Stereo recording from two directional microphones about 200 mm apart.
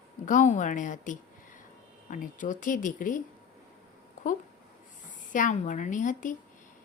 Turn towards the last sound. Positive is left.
turn(degrees=40)  # may be behind; listen again after turning